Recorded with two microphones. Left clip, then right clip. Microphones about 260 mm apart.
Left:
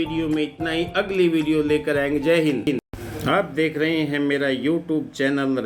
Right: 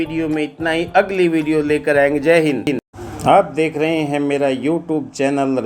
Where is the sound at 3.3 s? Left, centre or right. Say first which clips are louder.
Right 8 dB; right.